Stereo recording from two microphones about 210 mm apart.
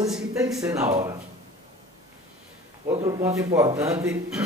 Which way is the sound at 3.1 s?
15° right (ahead or behind).